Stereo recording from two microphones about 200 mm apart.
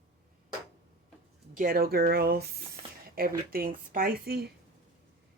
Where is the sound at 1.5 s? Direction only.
45° right (ahead or behind).